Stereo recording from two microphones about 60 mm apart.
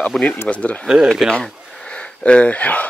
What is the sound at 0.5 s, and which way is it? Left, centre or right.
Speech, left.